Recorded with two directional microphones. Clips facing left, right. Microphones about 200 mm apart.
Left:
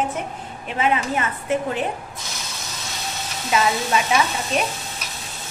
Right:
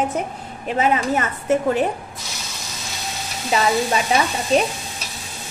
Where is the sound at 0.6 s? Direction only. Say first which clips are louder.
Right 3 dB; 40° right (ahead or behind).